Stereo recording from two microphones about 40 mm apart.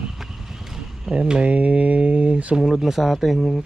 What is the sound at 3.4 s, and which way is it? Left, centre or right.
Speech, centre.